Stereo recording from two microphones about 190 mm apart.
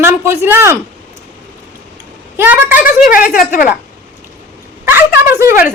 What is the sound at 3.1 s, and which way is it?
Speech, 45° left (ahead or behind).